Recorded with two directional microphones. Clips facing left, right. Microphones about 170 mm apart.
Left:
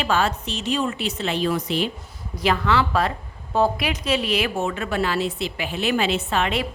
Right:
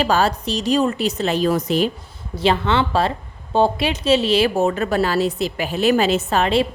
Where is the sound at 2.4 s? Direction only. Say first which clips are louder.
Right 3 dB; 30° right (ahead or behind).